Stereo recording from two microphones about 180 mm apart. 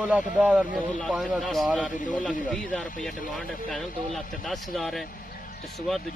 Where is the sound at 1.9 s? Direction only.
45° left (ahead or behind).